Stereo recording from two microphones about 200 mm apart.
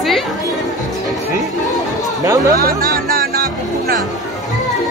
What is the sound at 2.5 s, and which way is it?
Music, 45° right (ahead or behind).